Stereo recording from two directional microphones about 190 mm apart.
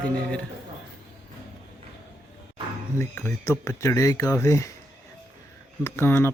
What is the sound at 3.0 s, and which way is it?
Speech, 15° left (ahead or behind).